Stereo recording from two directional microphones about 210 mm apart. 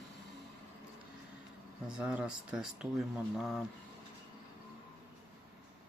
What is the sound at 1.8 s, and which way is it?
Speech, 5° right (ahead or behind).